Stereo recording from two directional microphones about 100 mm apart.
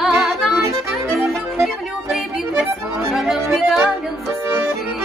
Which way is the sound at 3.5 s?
Centre (ahead or behind).